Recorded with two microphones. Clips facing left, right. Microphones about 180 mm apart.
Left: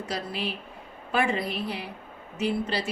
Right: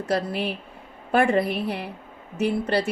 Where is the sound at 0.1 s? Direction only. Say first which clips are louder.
Right 8 dB; 55° right (ahead or behind).